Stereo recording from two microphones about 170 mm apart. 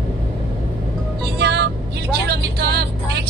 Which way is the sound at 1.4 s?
75° right (ahead or behind).